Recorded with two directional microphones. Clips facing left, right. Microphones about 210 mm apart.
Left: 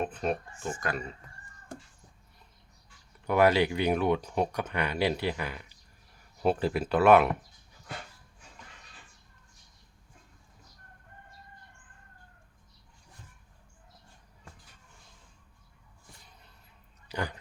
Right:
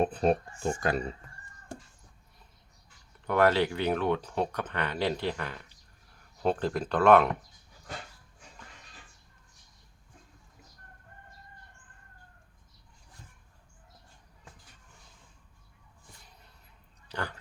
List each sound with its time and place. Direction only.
0.0 s speech: 35° right (ahead or behind)
3.2 s speech: 10° left (ahead or behind)
17.1 s speech: 15° left (ahead or behind)